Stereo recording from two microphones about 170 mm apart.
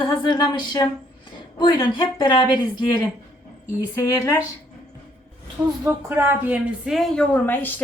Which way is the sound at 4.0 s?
20° left (ahead or behind).